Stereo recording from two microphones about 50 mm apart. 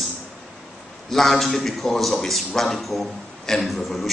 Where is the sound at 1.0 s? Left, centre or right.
Centre.